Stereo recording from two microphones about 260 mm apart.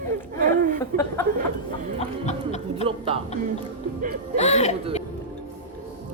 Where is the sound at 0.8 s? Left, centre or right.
Centre.